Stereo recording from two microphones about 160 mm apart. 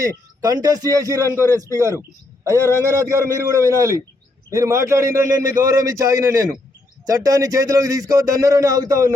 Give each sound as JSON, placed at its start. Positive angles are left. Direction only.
{"t": 0.0, "sound": "a man's voice", "side_deg": -25}